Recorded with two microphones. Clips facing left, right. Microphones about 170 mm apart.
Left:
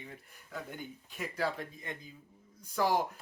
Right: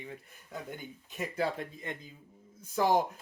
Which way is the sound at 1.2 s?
20° right (ahead or behind).